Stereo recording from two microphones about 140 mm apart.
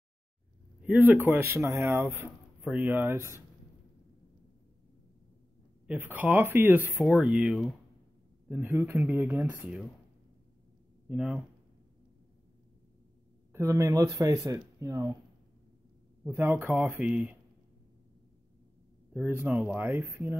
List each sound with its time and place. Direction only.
0.8 s speech: 10° right (ahead or behind)
5.9 s speech: 15° right (ahead or behind)
8.5 s speech: 15° right (ahead or behind)
11.1 s speech: 5° right (ahead or behind)
13.5 s speech: 20° right (ahead or behind)
16.3 s speech: 15° right (ahead or behind)
19.1 s speech: 10° right (ahead or behind)